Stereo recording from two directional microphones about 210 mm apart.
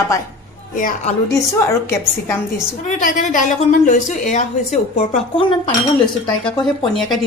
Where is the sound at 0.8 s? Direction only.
40° left (ahead or behind).